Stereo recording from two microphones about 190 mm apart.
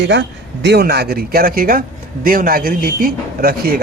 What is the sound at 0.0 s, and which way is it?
A man's voice, 65° right (ahead or behind).